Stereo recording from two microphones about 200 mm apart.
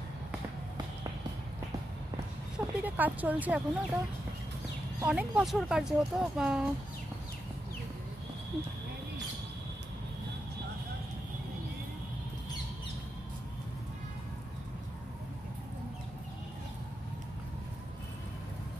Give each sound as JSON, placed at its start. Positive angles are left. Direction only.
{"t": 2.6, "sound": "speech", "side_deg": -10}
{"t": 5.0, "sound": "speech", "side_deg": -5}